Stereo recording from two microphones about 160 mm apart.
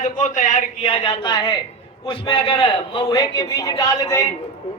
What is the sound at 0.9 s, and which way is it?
A man's voice, 35° left (ahead or behind).